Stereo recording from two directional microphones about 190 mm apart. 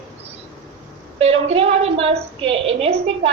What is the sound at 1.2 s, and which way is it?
A woman's voice, 35° right (ahead or behind).